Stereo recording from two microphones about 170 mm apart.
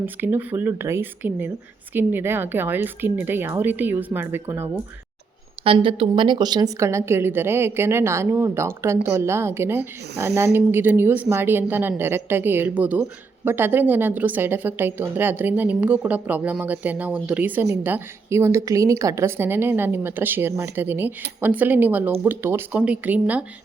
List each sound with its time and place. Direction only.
0.0 s a woman's voice: 10° right (ahead or behind)
5.6 s a woman's voice: 30° right (ahead or behind); by 23.4 s 10° right (ahead or behind)